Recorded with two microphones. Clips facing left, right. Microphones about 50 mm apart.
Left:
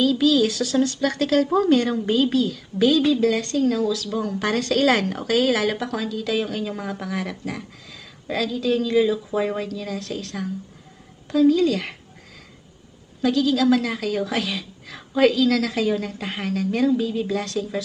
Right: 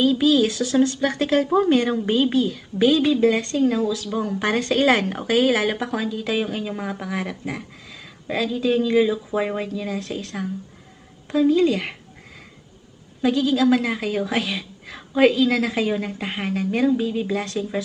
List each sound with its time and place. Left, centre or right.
0.0 s a woman's voice: right
13.2 s a woman's voice: right